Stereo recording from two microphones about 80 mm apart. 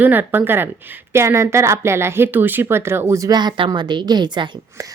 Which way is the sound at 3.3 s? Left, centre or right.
Right.